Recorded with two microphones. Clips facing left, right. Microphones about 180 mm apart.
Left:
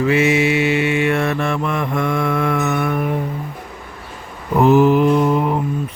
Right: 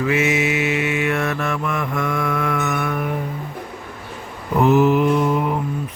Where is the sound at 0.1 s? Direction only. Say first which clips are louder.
Left 4 dB; 30° left (ahead or behind).